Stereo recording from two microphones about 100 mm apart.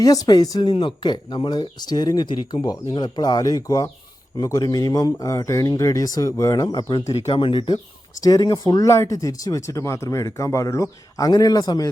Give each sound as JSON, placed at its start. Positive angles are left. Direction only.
{"t": 0.0, "sound": "speech", "side_deg": 40}
{"t": 0.7, "sound": "speech", "side_deg": 55}
{"t": 7.3, "sound": "speech", "side_deg": 55}
{"t": 8.2, "sound": "speech", "side_deg": 40}